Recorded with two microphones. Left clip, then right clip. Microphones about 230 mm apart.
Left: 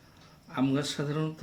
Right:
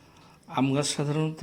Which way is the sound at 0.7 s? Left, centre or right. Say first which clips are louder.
Right 3 dB; centre.